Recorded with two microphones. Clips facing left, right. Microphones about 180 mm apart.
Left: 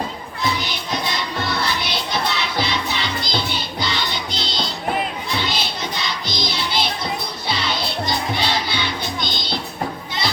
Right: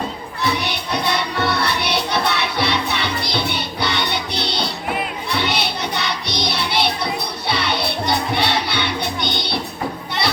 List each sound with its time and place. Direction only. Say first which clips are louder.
0.4 s music: right 2 dB; 65° right (ahead or behind)